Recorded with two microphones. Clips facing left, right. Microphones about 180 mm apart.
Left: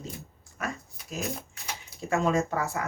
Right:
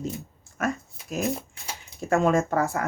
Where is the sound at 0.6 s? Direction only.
50° right (ahead or behind).